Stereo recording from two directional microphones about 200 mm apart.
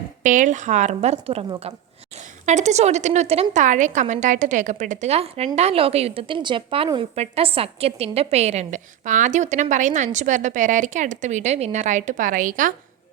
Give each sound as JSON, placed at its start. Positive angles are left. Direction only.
{"t": 0.2, "sound": "a woman's voice", "side_deg": -40}